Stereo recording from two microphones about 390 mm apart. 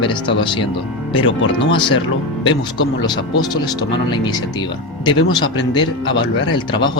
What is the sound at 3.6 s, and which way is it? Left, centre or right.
Speech, centre.